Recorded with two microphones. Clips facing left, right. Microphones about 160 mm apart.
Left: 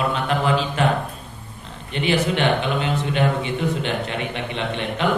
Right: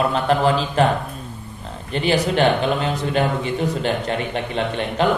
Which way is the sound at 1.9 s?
40° right (ahead or behind).